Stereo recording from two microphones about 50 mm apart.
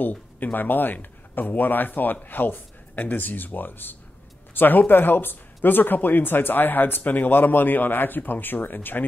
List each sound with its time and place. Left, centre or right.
0.0 s speech: left